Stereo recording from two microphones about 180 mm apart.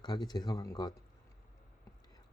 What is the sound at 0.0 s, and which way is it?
Speech, 20° left (ahead or behind).